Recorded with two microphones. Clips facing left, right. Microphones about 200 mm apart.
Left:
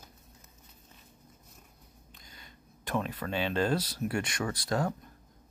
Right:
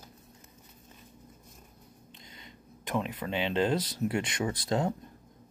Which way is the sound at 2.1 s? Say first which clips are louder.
Right 3 dB; 25° right (ahead or behind).